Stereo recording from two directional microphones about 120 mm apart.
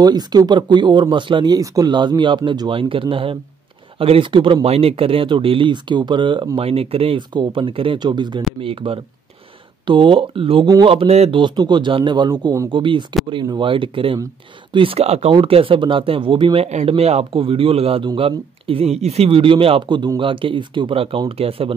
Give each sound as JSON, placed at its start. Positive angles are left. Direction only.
{"t": 0.0, "sound": "speech", "side_deg": -35}
{"t": 16.6, "sound": "speech", "side_deg": -60}